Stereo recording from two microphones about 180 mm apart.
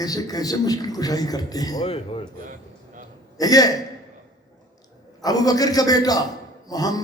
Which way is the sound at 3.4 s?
20° left (ahead or behind).